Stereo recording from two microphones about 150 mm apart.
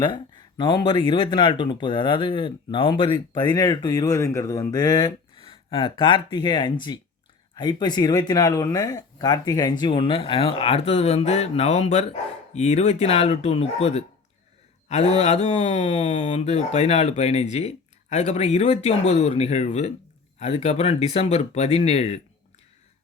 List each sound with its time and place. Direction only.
0.0 s speech: 30° left (ahead or behind)